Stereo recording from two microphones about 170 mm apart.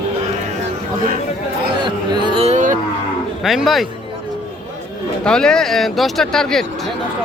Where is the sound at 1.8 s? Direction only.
25° right (ahead or behind).